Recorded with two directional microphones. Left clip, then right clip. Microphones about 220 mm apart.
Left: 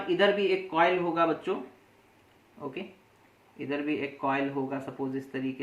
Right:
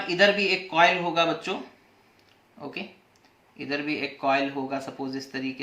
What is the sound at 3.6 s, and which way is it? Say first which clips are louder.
Speech: right 2 dB; 15° right (ahead or behind).